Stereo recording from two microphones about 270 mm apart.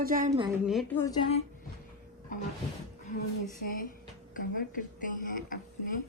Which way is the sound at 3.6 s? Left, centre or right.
Left.